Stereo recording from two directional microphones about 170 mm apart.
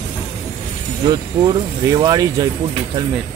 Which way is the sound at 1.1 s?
25° right (ahead or behind).